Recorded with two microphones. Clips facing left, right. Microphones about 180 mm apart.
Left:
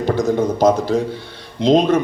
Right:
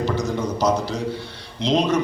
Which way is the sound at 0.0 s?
55° left (ahead or behind).